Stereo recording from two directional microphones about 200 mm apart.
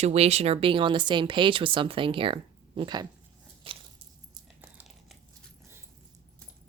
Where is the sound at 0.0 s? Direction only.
30° right (ahead or behind).